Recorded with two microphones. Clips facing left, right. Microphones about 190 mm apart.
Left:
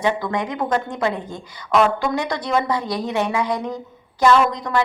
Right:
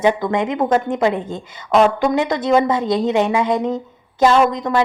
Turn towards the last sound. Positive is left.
turn(degrees=-20)  # may be behind; listen again after turning